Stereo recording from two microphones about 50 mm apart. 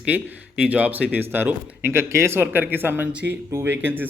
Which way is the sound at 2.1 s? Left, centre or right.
Right.